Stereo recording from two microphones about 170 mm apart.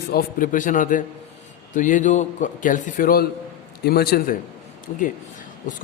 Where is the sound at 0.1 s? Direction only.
55° left (ahead or behind).